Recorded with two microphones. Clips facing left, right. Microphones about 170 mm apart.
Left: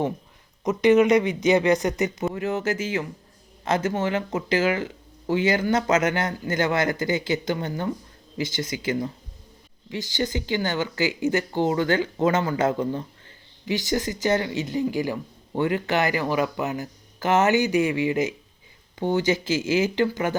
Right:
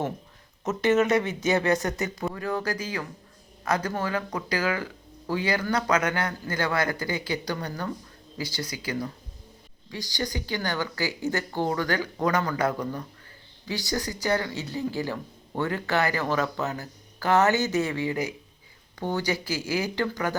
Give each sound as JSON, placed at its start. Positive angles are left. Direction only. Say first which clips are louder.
{"t": 0.6, "sound": "speech", "louder": "left 5 dB", "side_deg": 15}